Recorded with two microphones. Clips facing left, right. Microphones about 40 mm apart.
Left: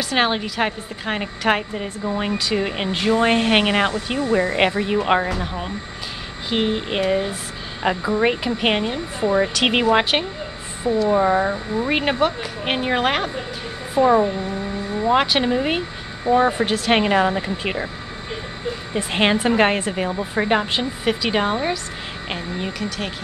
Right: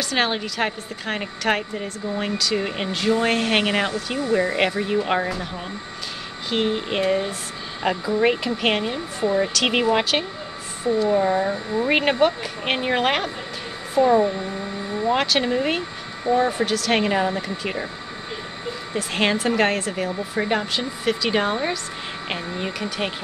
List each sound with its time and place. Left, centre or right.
0.1 s a woman's voice: centre
6.5 s a woman's voice: centre
11.5 s a woman's voice: centre
13.9 s a woman's voice: centre
16.3 s a woman's voice: left
18.9 s a woman's voice: left; by 21.7 s centre
22.3 s speech: centre